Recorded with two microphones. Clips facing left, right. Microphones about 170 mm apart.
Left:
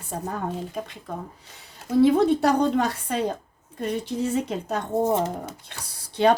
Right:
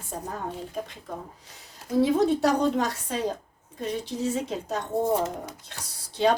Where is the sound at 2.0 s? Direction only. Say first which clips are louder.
Left 3 dB; 60° left (ahead or behind).